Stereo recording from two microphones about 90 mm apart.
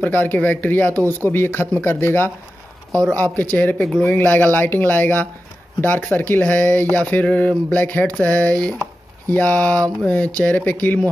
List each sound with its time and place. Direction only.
0.0 s speech: 20° left (ahead or behind)
3.5 s speech: 15° left (ahead or behind)
3.8 s speech: 5° left (ahead or behind)
4.1 s speech: 15° left (ahead or behind)